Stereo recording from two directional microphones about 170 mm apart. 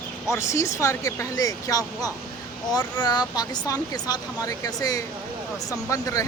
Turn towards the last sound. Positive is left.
turn(degrees=20)  # may be behind; listen again after turning